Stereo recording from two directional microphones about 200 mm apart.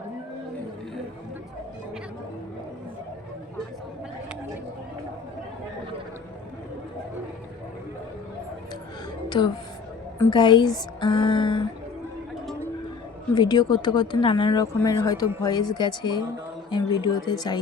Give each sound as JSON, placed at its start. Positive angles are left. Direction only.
{"t": 9.3, "sound": "speech", "side_deg": 25}
{"t": 13.3, "sound": "speech", "side_deg": 20}